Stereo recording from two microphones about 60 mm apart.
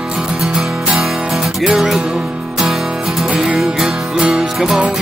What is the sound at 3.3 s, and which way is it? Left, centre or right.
Music, centre.